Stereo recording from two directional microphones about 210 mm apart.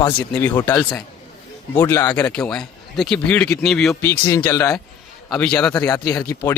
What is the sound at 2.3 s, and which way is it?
A man's voice, 5° left (ahead or behind).